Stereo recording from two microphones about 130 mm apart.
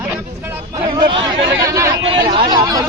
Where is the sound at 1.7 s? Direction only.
25° right (ahead or behind).